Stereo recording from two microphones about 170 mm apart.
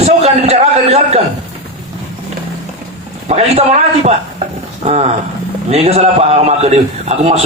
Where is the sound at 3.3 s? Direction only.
40° right (ahead or behind).